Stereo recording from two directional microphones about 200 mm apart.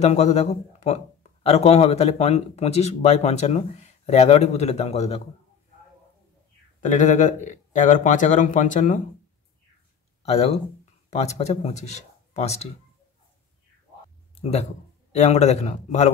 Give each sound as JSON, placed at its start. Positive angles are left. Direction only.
{"t": 0.0, "sound": "speech", "side_deg": 35}
{"t": 6.8, "sound": "speech", "side_deg": 40}
{"t": 10.2, "sound": "speech", "side_deg": 30}
{"t": 14.3, "sound": "speech", "side_deg": 30}